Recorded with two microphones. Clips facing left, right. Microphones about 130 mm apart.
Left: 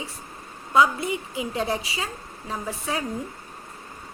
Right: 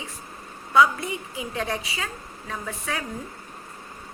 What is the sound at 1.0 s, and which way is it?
Speech, 30° right (ahead or behind).